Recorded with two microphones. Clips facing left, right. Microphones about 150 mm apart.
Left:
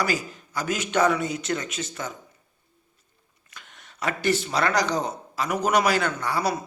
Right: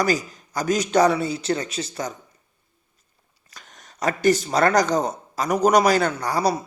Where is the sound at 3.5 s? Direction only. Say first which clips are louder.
Right 1 dB; 40° right (ahead or behind).